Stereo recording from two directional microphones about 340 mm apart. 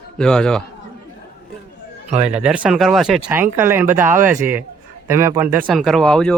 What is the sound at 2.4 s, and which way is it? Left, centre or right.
Speech, centre.